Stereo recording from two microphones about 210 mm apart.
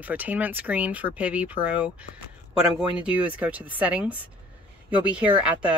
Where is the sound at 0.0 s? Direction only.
5° right (ahead or behind).